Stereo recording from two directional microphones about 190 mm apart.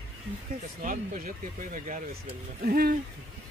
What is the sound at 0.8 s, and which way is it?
Speech, 45° right (ahead or behind).